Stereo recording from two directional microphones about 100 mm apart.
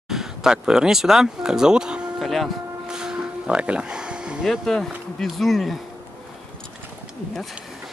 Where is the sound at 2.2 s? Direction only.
Centre (ahead or behind).